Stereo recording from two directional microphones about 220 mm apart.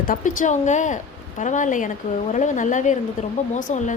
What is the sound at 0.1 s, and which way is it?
Speech, 35° left (ahead or behind).